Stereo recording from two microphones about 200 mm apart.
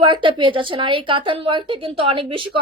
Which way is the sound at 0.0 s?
25° right (ahead or behind).